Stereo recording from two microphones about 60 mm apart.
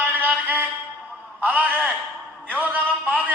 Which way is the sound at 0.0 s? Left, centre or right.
Right.